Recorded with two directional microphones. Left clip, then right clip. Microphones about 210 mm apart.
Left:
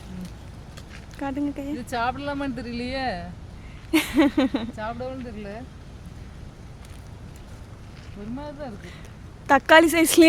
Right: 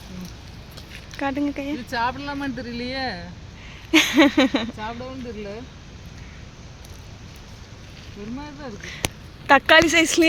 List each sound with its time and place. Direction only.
1.1 s speech: centre (ahead or behind)
1.9 s speech: 20° left (ahead or behind)
3.9 s speech: 5° left (ahead or behind)
9.5 s speech: 15° left (ahead or behind)